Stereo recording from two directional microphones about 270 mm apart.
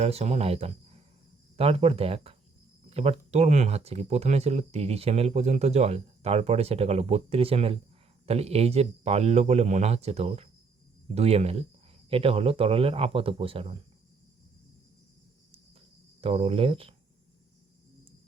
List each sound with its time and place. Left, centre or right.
0.0 s speech: right
16.2 s speech: right